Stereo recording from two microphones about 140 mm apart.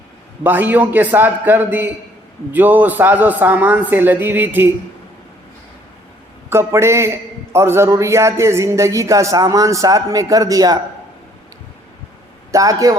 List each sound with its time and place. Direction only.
0.4 s a man's voice: 15° right (ahead or behind)
6.5 s a man's voice: 20° right (ahead or behind)
12.5 s a man's voice: 25° right (ahead or behind)